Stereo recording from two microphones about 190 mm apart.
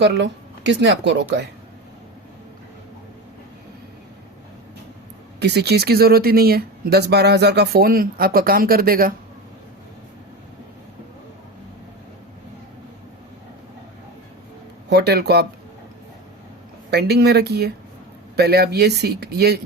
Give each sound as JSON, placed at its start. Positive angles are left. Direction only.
{"t": 0.0, "sound": "speech", "side_deg": -70}
{"t": 5.4, "sound": "speech", "side_deg": -60}
{"t": 14.8, "sound": "speech", "side_deg": -60}
{"t": 16.9, "sound": "speech", "side_deg": -60}